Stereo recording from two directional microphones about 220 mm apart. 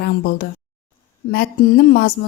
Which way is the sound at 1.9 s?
45° left (ahead or behind).